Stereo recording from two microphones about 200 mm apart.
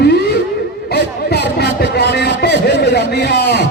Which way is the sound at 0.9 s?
55° left (ahead or behind).